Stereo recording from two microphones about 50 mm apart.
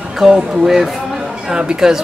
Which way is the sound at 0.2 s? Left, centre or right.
Centre.